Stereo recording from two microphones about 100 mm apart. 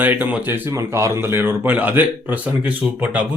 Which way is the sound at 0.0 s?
20° right (ahead or behind).